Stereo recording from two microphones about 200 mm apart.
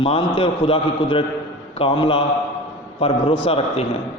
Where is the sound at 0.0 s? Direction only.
25° left (ahead or behind).